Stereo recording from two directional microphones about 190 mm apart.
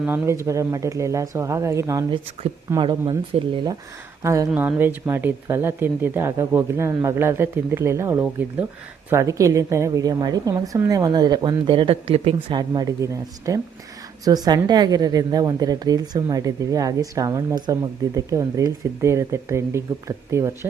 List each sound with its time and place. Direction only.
0.0 s a woman's voice: 10° right (ahead or behind)
4.2 s a woman's voice: 15° right (ahead or behind)